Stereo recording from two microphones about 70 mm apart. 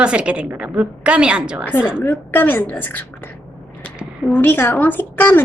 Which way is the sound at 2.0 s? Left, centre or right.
Left.